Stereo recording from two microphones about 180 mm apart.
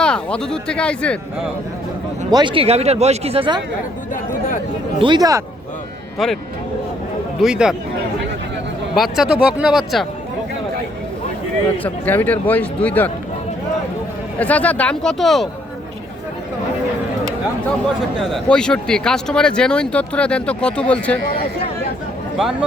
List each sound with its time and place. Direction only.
0.0 s speech: 5° left (ahead or behind)
2.3 s speech: 25° right (ahead or behind)
4.9 s speech: 25° right (ahead or behind)
7.4 s speech: 5° right (ahead or behind)
9.0 s speech: 5° right (ahead or behind)
11.8 s speech: 10° left (ahead or behind)
14.3 s speech: 10° left (ahead or behind)
18.2 s speech: centre (ahead or behind)